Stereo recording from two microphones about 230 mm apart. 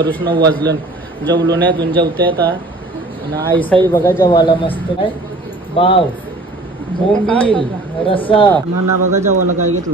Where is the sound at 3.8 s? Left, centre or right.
Centre.